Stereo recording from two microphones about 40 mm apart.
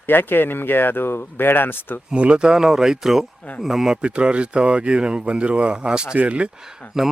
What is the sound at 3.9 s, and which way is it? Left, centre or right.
Speech, right.